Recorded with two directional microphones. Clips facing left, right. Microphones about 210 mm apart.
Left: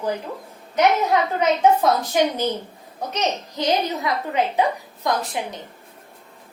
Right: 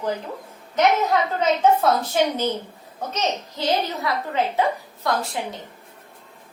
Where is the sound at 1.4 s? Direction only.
15° left (ahead or behind).